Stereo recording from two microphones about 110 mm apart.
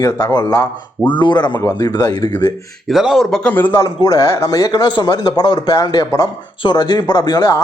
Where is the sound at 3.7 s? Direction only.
30° left (ahead or behind).